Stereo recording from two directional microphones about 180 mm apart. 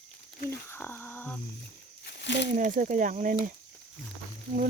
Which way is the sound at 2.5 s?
45° right (ahead or behind).